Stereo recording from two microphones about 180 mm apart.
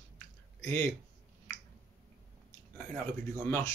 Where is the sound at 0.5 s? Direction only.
15° left (ahead or behind).